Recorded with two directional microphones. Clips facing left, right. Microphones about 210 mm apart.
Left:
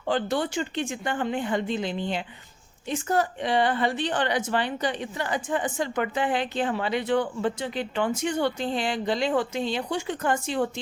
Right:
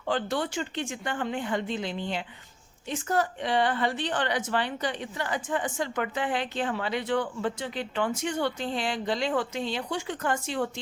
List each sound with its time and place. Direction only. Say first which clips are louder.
0.1 s a woman's voice: left 3 dB; 15° left (ahead or behind)